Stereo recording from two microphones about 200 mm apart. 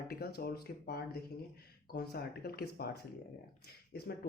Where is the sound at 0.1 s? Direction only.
50° left (ahead or behind).